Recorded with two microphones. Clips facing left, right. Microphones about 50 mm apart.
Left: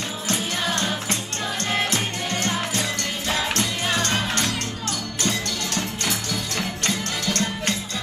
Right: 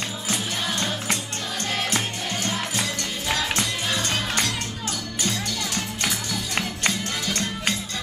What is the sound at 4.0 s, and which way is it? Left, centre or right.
Music, centre.